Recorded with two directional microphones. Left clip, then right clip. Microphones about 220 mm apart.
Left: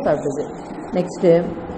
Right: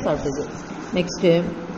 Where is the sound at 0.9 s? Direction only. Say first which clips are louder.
Left 3 dB; 35° left (ahead or behind).